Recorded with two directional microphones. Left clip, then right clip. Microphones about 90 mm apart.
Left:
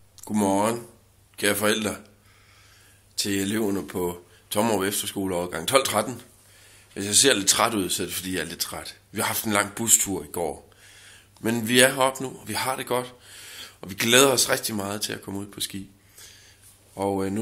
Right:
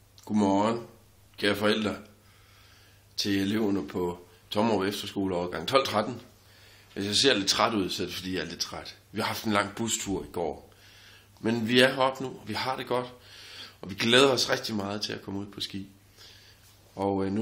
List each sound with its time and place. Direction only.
0.2 s a man's voice: 30° left (ahead or behind)
3.2 s speech: 25° left (ahead or behind)